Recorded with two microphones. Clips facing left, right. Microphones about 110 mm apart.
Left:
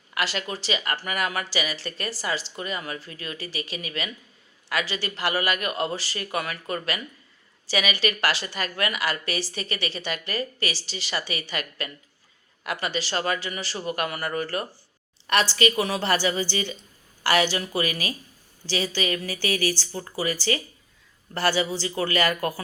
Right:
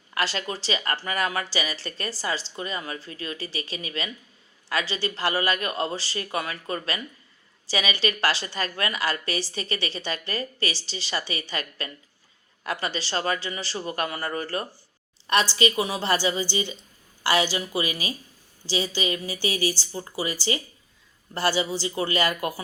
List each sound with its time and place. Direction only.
0.1 s a woman's voice: 35° right (ahead or behind); by 22.6 s 15° right (ahead or behind)